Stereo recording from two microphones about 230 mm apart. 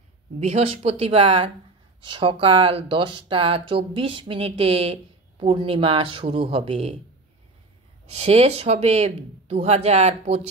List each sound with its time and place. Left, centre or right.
0.4 s speech: right
8.1 s speech: right